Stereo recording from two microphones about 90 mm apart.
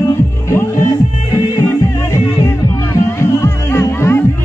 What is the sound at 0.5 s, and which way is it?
Music, 30° left (ahead or behind).